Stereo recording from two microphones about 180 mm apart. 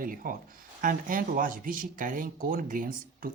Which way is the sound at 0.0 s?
50° right (ahead or behind).